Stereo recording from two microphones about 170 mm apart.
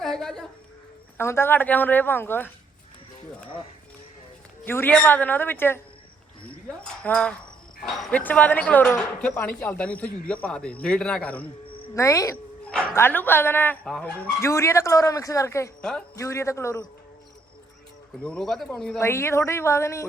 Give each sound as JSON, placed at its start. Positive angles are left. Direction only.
{"t": 0.0, "sound": "a sound", "side_deg": 0}
{"t": 1.2, "sound": "a man's voice", "side_deg": 15}
{"t": 4.6, "sound": "a man's voice", "side_deg": 10}
{"t": 15.8, "sound": "speech", "side_deg": 5}
{"t": 16.1, "sound": "a man's voice", "side_deg": 15}
{"t": 18.2, "sound": "speech", "side_deg": 5}
{"t": 18.9, "sound": "a man's voice", "side_deg": 15}